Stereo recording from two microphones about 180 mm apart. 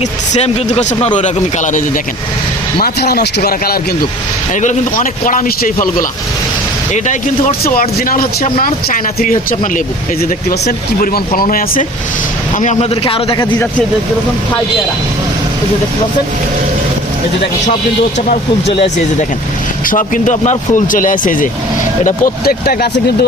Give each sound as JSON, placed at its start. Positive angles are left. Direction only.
{"t": 0.3, "sound": "a man's voice", "side_deg": 40}
{"t": 2.7, "sound": "speech", "side_deg": 60}
{"t": 4.5, "sound": "speech", "side_deg": 45}
{"t": 6.9, "sound": "a man's voice", "side_deg": 40}
{"t": 18.3, "sound": "a man's voice", "side_deg": 35}
{"t": 19.9, "sound": "speech", "side_deg": 45}